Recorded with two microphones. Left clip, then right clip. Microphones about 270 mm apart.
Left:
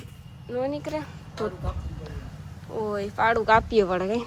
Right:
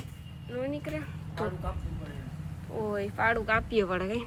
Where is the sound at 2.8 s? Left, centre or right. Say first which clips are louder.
Left 5 dB; centre.